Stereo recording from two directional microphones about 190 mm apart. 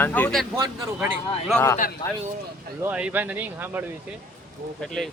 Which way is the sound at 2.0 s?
25° left (ahead or behind).